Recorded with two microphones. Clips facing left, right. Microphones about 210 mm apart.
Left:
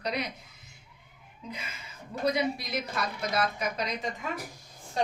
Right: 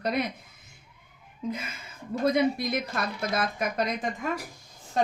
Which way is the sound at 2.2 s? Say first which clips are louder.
Right 4 dB; 50° right (ahead or behind).